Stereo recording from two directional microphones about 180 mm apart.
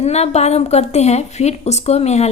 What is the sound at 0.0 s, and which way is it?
A woman's voice, 35° left (ahead or behind).